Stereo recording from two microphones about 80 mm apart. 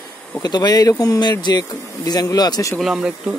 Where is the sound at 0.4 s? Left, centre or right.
Left.